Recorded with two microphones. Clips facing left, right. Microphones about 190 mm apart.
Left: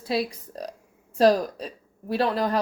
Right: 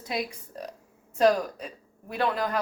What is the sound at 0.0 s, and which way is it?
Speech, 30° left (ahead or behind).